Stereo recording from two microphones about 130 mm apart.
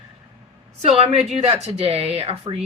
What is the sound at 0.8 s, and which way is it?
Speech, 50° right (ahead or behind).